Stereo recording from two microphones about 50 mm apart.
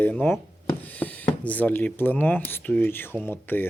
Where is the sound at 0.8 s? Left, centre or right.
Left.